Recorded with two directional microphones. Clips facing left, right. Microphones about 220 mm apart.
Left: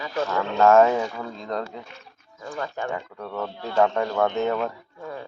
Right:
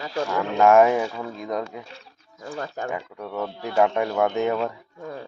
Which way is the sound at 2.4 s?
40° right (ahead or behind).